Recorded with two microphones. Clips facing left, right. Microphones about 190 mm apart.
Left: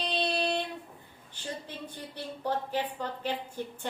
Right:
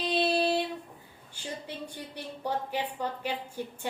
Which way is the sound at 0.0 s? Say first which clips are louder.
Right 4 dB; 5° right (ahead or behind).